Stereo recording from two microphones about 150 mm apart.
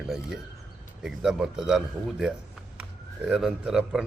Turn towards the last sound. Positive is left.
turn(degrees=-5)  # may be behind; listen again after turning